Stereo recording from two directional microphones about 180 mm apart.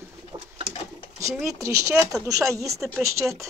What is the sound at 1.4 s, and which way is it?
Speech, 15° right (ahead or behind).